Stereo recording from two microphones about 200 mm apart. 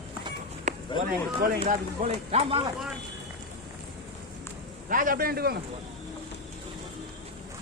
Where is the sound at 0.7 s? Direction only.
35° right (ahead or behind).